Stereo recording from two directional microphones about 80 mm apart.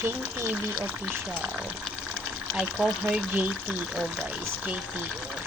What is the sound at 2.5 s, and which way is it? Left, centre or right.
Speech, centre.